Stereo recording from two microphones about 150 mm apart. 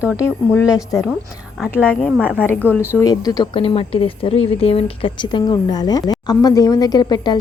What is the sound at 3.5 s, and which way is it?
A woman's voice, 40° left (ahead or behind).